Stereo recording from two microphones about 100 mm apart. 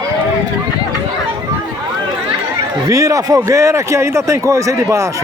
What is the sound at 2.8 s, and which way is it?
Speech, 35° right (ahead or behind).